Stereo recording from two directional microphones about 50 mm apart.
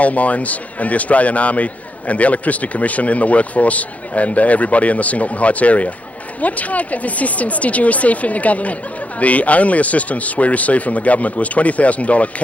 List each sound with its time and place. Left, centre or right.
0.0 s speech: left